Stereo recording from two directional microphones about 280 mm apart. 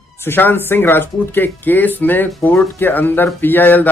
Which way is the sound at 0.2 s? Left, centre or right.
Centre.